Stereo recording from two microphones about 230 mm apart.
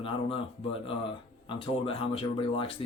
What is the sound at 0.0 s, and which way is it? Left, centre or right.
Speech, left.